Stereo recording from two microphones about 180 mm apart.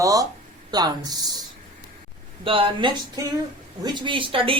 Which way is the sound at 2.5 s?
30° right (ahead or behind).